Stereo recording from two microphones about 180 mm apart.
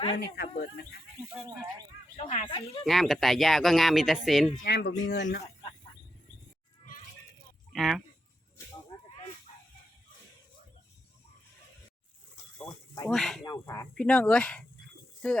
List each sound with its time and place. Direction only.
0.2 s speech: 60° left (ahead or behind)
1.2 s speech: 5° right (ahead or behind)
2.1 s speech: 35° left (ahead or behind)
2.8 s speech: centre (ahead or behind)
4.6 s speech: 65° left (ahead or behind)
7.7 s speech: centre (ahead or behind)
12.5 s snake: 20° left (ahead or behind)
13.1 s speech: centre (ahead or behind)
13.4 s speech: 20° left (ahead or behind)
13.9 s speech: 5° left (ahead or behind)